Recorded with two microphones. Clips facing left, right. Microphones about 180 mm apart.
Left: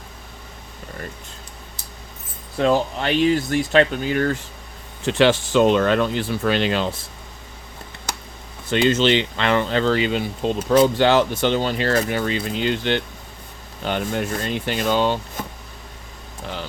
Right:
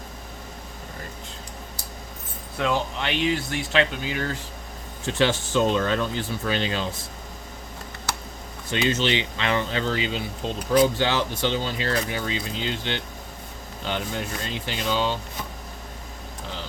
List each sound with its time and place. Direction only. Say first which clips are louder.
2.6 s speech: left 6 dB; 40° left (ahead or behind)
5.0 s speech: left 6 dB; 75° left (ahead or behind)
8.7 s speech: left 6 dB; 60° left (ahead or behind)